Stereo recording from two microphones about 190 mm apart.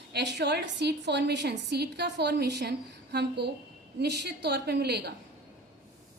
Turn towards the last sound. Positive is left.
turn(degrees=-60)  # may be behind; listen again after turning